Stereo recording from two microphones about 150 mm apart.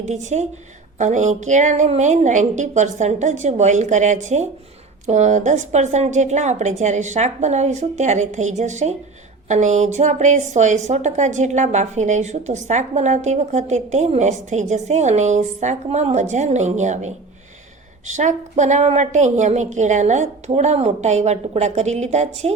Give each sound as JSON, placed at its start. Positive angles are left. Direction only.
{"t": 0.0, "sound": "a woman's voice", "side_deg": -50}